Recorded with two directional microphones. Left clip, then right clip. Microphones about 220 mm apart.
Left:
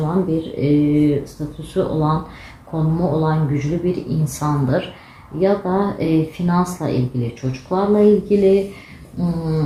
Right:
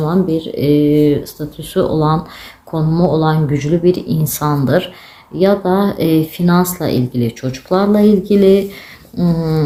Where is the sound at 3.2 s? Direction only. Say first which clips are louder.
Right 5 dB; 45° right (ahead or behind).